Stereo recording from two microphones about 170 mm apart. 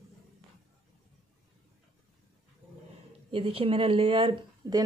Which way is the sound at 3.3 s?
35° right (ahead or behind).